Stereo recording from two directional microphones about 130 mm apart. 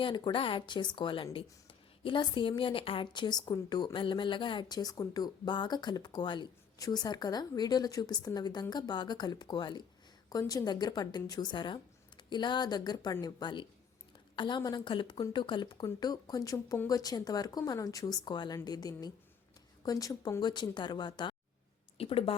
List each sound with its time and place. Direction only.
0.0 s a woman's voice: 40° left (ahead or behind)
21.9 s speech: 45° left (ahead or behind)